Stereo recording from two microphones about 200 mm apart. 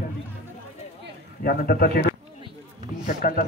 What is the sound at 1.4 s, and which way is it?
A man's voice, 50° left (ahead or behind).